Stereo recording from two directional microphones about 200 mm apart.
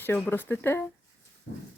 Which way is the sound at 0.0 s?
10° left (ahead or behind).